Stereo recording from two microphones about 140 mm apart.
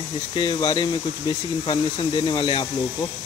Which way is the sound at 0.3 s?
30° left (ahead or behind).